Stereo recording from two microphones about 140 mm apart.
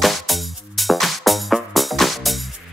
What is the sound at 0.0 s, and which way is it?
Music, centre (ahead or behind).